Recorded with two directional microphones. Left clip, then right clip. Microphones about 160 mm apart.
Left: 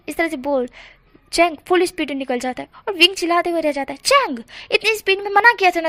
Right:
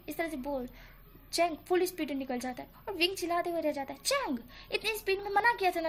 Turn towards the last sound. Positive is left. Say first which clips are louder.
# left 14 dB
turn(degrees=30)  # may be behind; listen again after turning